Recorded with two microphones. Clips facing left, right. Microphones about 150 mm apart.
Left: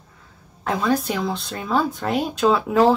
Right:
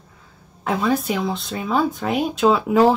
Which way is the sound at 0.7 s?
5° right (ahead or behind).